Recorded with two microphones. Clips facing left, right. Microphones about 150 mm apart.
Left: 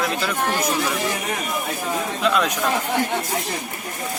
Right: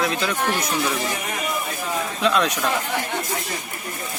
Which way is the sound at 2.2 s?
Centre (ahead or behind).